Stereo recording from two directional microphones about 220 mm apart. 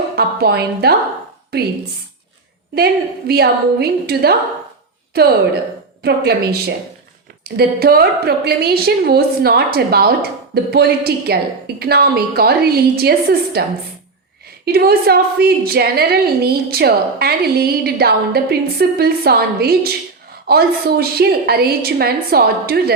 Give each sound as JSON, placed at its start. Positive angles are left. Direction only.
{"t": 0.2, "sound": "a woman's voice", "side_deg": -45}
{"t": 2.7, "sound": "a woman's voice", "side_deg": -45}